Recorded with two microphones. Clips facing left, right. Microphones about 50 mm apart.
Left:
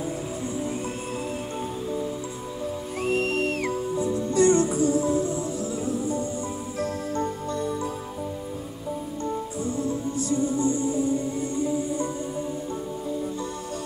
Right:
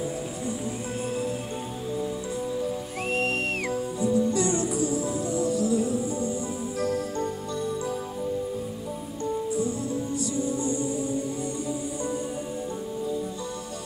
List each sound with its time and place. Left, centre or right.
3.0 s music: right
3.6 s music: left
10.1 s music: left